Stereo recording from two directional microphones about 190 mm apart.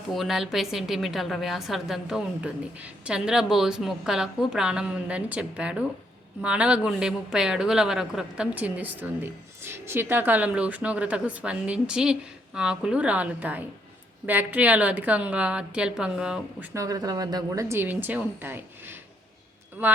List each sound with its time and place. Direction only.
0.1 s a woman's voice: centre (ahead or behind)
16.7 s speech: 20° right (ahead or behind)